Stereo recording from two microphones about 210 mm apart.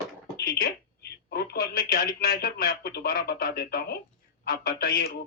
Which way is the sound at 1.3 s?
50° left (ahead or behind).